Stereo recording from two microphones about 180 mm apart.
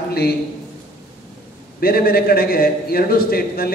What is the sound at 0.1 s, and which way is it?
Speech, 60° left (ahead or behind).